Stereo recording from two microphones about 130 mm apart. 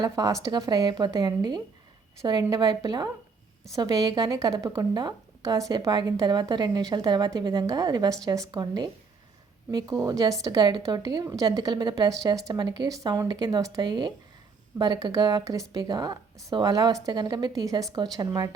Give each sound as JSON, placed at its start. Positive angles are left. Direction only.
{"t": 0.0, "sound": "a woman's voice", "side_deg": -30}